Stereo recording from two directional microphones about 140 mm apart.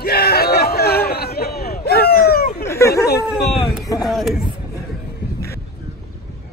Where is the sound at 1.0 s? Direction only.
90° left.